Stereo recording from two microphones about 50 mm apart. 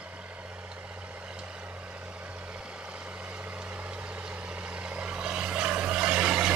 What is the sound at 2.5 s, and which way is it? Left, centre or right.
Vehicle, right.